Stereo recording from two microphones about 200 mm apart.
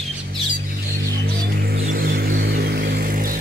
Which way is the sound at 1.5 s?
50° right (ahead or behind).